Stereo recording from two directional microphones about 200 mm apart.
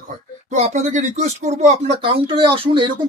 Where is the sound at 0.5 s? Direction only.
35° right (ahead or behind).